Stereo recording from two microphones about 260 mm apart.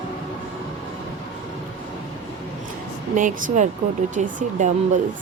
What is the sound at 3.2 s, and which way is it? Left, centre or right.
Speech, right.